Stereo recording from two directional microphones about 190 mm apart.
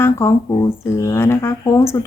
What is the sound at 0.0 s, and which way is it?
Speech, 15° left (ahead or behind).